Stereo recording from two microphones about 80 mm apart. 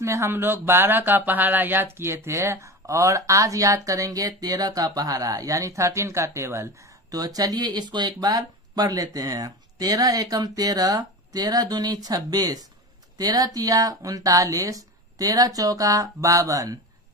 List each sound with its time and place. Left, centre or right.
0.0 s speech: right
7.1 s speech: right